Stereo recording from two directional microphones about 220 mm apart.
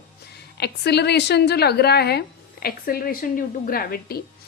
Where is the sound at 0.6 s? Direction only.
50° left (ahead or behind).